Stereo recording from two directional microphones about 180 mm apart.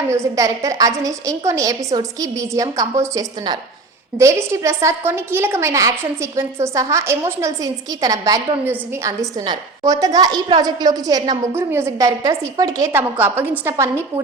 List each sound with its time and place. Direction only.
0.1 s a woman's voice: 15° right (ahead or behind)